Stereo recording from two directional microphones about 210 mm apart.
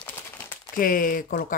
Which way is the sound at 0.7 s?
40° left (ahead or behind).